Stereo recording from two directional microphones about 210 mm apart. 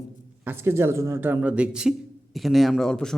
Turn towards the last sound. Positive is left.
turn(degrees=5)  # may be behind; listen again after turning